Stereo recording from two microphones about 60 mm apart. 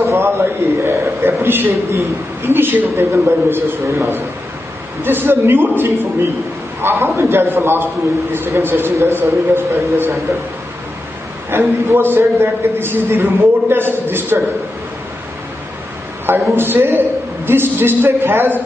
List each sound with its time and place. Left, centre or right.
0.0 s a man's voice: right
5.0 s a man's voice: right
11.5 s a man's voice: right
16.3 s a man's voice: right